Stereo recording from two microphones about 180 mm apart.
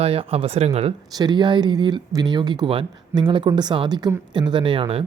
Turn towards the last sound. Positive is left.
turn(degrees=-30)  # may be behind; listen again after turning